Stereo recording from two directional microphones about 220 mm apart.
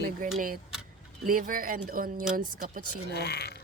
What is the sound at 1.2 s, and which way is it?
Speech, 40° right (ahead or behind).